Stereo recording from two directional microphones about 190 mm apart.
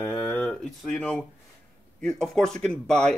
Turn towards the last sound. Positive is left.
turn(degrees=5)  # may be behind; listen again after turning